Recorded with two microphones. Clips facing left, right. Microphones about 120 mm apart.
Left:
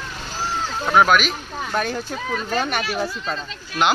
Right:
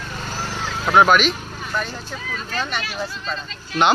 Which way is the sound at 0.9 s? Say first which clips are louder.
Right 2 dB; centre (ahead or behind).